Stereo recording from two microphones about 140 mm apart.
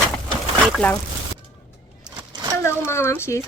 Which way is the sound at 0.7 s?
10° left (ahead or behind).